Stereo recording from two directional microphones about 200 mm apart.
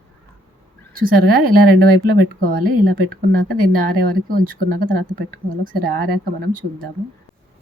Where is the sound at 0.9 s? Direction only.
45° right (ahead or behind).